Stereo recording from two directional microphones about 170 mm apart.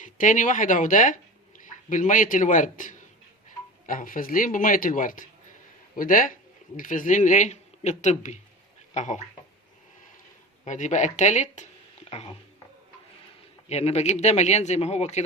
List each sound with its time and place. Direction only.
0.0 s speech: 50° left (ahead or behind)
10.7 s speech: 45° left (ahead or behind)
13.7 s speech: 40° left (ahead or behind)